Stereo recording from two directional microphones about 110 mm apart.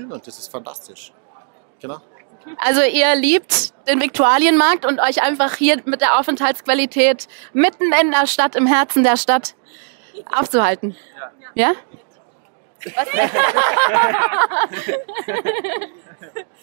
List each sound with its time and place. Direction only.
0.1 s speech: 30° right (ahead or behind)
2.6 s speech: 20° right (ahead or behind)
12.9 s speech: 20° right (ahead or behind)